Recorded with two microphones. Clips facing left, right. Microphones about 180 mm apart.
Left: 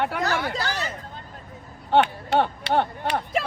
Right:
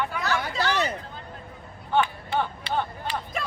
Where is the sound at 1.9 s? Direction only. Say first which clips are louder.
Left 5 dB; 70° left (ahead or behind).